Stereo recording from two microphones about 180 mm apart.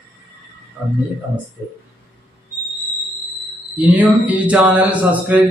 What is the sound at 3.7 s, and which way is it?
A man's voice, 10° right (ahead or behind).